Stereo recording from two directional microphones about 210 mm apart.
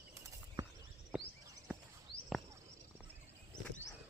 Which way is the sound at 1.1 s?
5° right (ahead or behind).